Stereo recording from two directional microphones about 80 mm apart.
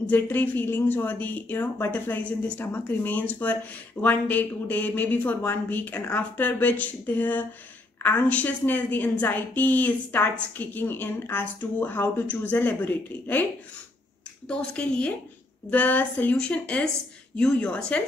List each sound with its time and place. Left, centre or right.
0.0 s a woman's voice: left
14.5 s a woman's voice: centre